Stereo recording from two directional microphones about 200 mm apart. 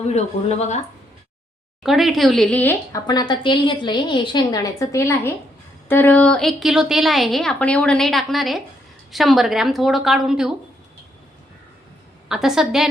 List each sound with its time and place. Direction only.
1.8 s a woman's voice: centre (ahead or behind)
3.1 s a woman's voice: 20° left (ahead or behind); by 10.5 s 5° right (ahead or behind)
12.3 s a woman's voice: centre (ahead or behind)